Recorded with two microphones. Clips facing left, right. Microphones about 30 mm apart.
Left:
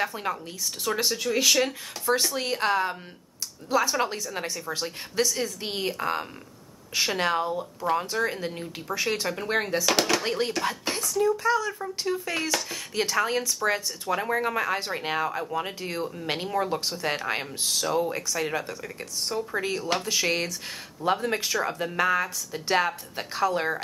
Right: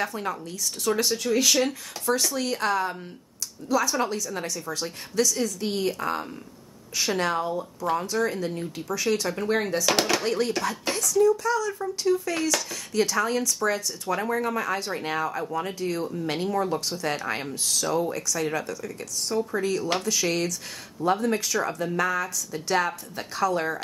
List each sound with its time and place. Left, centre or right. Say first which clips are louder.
0.0 s speech: even; centre
1.7 s speech: even; left
7.4 s speech: even; centre
8.1 s speech: right 2 dB; left
9.8 s speech: right 1 dB; centre
10.2 s speech: right 2 dB; centre
10.9 s a sound: right 2 dB; centre
11.2 s speech: right 1 dB; left
12.4 s speech: right 2 dB; centre
12.6 s speech: right 3 dB; left
14.0 s speech: right 1 dB; centre
14.3 s speech: left 2 dB; left